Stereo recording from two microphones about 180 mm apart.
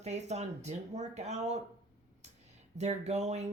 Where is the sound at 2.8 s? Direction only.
40° right (ahead or behind).